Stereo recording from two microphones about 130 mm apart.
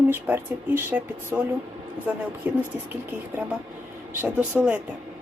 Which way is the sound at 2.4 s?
15° right (ahead or behind).